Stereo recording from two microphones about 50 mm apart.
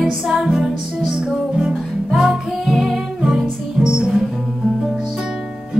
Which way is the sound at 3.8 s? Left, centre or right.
Centre.